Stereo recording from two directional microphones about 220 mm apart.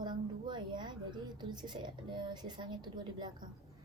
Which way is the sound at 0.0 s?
20° right (ahead or behind).